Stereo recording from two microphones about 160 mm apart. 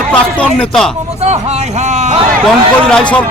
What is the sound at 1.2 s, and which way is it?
Speech, 45° right (ahead or behind).